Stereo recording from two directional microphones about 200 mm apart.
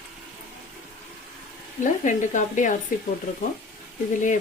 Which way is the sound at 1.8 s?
40° left (ahead or behind).